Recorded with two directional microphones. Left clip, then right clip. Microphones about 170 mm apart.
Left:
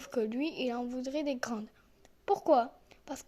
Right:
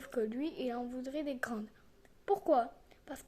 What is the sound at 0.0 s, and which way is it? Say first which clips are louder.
A woman's voice: left 3 dB; 20° left (ahead or behind).